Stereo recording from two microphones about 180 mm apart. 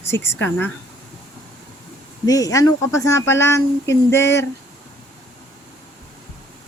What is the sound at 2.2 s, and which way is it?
Speech, 20° left (ahead or behind).